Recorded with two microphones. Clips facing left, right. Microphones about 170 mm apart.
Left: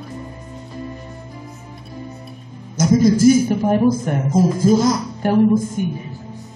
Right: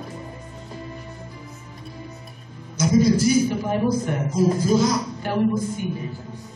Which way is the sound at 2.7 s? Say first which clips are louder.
Left 4 dB; 50° left (ahead or behind).